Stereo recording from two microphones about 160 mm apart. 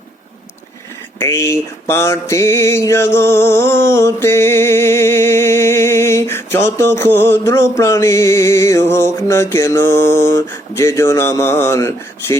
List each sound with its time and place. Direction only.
1.2 s mantra: 15° left (ahead or behind)